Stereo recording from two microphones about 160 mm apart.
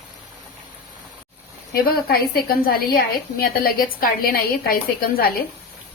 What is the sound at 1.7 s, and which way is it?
A woman's voice, 70° left (ahead or behind).